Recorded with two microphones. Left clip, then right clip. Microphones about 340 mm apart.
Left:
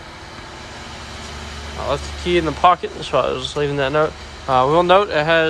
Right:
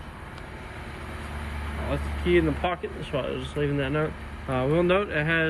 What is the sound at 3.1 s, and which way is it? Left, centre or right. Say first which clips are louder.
Speech: left 12 dB; left.